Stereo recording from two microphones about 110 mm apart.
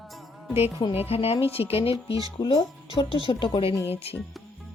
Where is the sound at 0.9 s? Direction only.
65° left (ahead or behind); by 3.7 s 50° left (ahead or behind).